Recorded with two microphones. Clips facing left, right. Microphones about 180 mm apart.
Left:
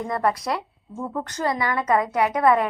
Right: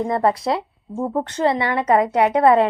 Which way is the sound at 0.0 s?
25° right (ahead or behind).